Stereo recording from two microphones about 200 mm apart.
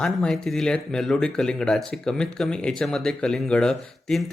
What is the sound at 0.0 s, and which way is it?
Speech, 5° left (ahead or behind).